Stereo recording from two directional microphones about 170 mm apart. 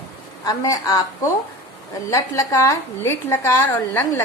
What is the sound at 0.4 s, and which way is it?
A woman's voice, 20° left (ahead or behind).